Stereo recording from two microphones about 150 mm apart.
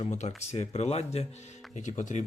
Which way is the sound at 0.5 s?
45° left (ahead or behind).